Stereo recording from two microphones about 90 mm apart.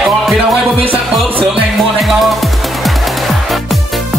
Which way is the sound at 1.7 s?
Centre (ahead or behind).